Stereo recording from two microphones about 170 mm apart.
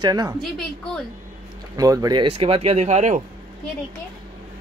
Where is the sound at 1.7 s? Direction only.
20° right (ahead or behind); by 3.2 s 45° right (ahead or behind).